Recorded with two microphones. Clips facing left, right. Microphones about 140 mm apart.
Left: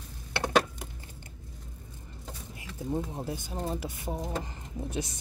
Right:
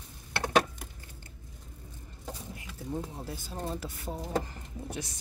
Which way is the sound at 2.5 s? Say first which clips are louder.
Left 5 dB; 20° left (ahead or behind).